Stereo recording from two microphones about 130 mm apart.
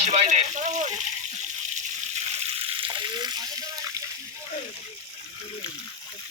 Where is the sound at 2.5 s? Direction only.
45° right (ahead or behind).